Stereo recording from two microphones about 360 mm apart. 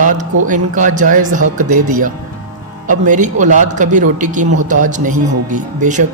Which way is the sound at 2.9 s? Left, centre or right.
Right.